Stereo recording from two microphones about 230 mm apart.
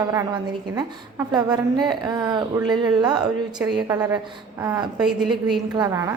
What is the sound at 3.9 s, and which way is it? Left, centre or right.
A woman's voice, centre.